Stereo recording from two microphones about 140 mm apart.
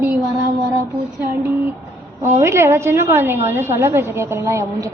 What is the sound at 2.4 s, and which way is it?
A woman's voice, 20° right (ahead or behind).